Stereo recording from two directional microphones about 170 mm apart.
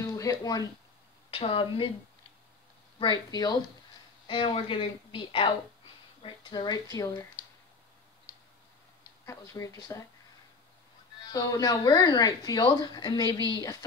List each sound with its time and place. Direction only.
0.0 s speech: 20° left (ahead or behind)
3.0 s speech: 25° left (ahead or behind)
9.2 s speech: 15° left (ahead or behind)
11.3 s speech: 20° left (ahead or behind)